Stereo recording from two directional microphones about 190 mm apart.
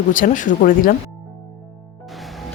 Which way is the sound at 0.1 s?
45° left (ahead or behind).